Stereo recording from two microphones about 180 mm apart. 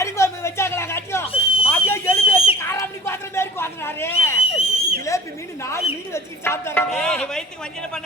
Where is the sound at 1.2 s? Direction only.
30° left (ahead or behind).